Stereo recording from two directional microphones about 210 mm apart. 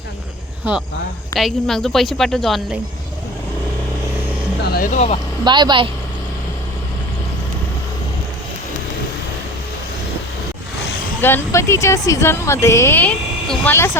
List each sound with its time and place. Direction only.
1.4 s speech: centre (ahead or behind)
4.7 s speech: 35° left (ahead or behind)
5.5 s speech: 20° right (ahead or behind)
11.2 s speech: 10° left (ahead or behind)